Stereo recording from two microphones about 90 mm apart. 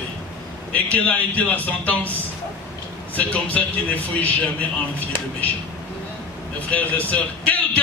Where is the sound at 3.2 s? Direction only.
15° left (ahead or behind).